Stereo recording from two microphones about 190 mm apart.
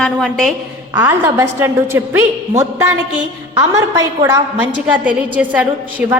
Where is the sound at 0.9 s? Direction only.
10° right (ahead or behind).